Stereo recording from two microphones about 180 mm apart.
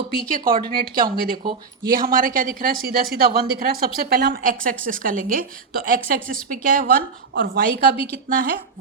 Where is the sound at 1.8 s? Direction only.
50° right (ahead or behind).